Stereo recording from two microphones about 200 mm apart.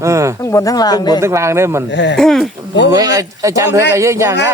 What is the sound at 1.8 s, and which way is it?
Speech, 60° left (ahead or behind).